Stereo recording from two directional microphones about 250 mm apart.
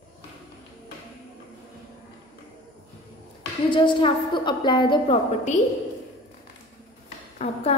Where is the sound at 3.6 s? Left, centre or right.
Centre.